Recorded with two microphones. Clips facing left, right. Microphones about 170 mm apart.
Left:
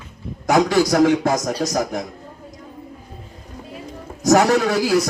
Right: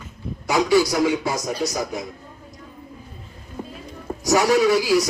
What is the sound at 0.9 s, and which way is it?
Speech, 65° left (ahead or behind).